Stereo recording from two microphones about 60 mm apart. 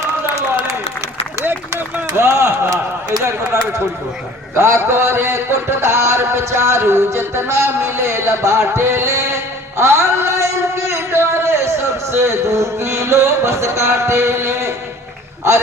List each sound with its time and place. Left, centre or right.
2.1 s a man's voice: right
12.1 s music: right